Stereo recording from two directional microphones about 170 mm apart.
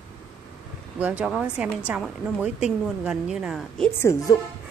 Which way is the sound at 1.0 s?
10° right (ahead or behind).